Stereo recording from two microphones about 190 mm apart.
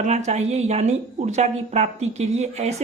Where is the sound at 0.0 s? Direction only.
35° right (ahead or behind).